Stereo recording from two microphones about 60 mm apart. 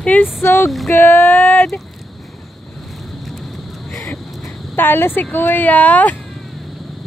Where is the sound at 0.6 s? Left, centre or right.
Centre.